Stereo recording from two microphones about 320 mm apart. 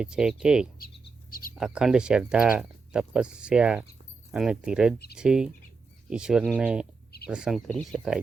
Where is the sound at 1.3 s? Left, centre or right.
Left.